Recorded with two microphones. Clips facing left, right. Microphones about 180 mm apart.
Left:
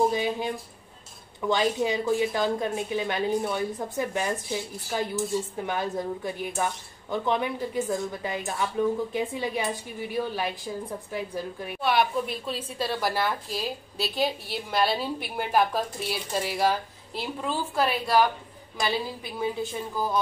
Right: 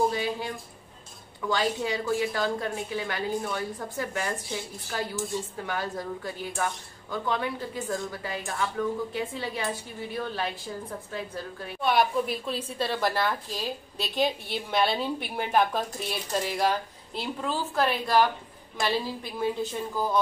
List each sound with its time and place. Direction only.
0.1 s a woman's voice: 20° left (ahead or behind)
11.8 s a woman's voice: centre (ahead or behind)